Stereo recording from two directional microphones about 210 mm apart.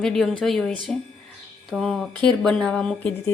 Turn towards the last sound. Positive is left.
turn(degrees=5)  # may be behind; listen again after turning